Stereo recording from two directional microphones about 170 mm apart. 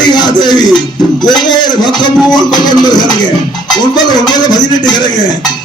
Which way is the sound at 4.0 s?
25° left (ahead or behind).